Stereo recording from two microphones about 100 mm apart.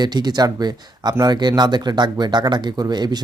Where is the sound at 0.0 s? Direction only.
45° right (ahead or behind).